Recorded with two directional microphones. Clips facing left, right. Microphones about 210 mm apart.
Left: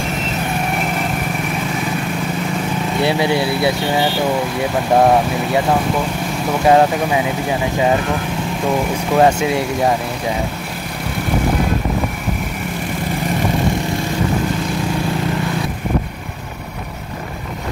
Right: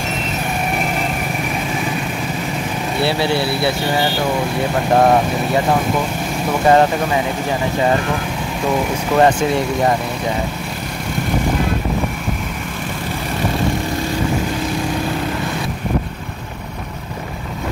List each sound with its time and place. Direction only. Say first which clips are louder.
3.0 s speech: left 1 dB; 15° left (ahead or behind)
4.9 s speech: left 1 dB; 5° left (ahead or behind)
6.6 s speech: left 1 dB; 5° left (ahead or behind)
9.1 s speech: even; 5° left (ahead or behind)